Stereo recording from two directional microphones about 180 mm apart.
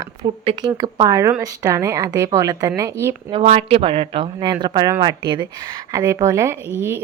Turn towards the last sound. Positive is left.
turn(degrees=-15)  # may be behind; listen again after turning